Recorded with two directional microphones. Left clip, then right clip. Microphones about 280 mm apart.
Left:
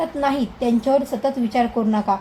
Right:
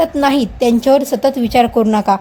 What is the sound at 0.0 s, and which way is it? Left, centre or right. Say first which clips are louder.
A woman's voice: right 8 dB; right.